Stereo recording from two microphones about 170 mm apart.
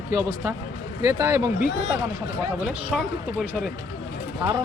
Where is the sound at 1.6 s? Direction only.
90° left.